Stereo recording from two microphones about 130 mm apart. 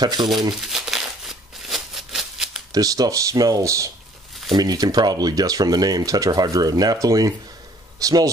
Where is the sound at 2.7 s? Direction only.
30° right (ahead or behind).